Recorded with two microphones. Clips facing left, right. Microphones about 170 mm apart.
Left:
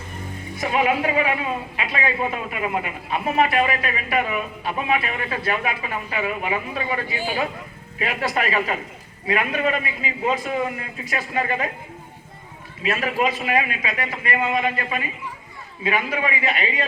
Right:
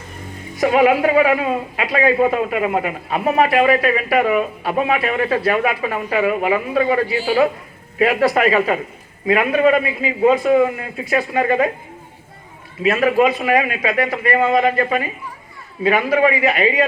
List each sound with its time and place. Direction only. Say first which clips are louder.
0.6 s a man's voice: right 7 dB; 40° right (ahead or behind)
12.8 s a man's voice: right 8 dB; 40° right (ahead or behind)